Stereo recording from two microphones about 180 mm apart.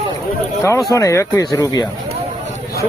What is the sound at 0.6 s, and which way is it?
Speech, 15° left (ahead or behind).